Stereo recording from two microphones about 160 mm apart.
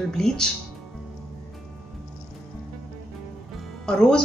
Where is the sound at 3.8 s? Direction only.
5° left (ahead or behind).